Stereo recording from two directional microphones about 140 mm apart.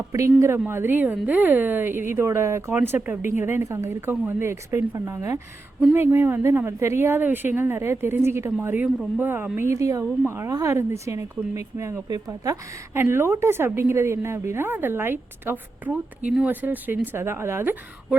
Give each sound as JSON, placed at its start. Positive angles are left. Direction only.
{"t": 0.1, "sound": "speech", "side_deg": -20}